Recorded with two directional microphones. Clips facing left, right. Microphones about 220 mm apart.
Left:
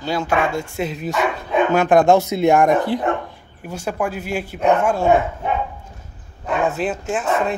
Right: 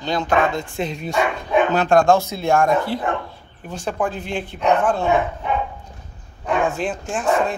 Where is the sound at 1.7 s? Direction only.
15° left (ahead or behind).